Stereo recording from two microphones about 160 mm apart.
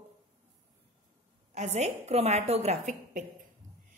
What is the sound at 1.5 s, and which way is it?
A woman's voice, 45° right (ahead or behind).